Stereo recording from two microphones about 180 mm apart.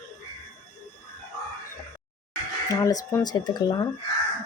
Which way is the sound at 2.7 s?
20° left (ahead or behind).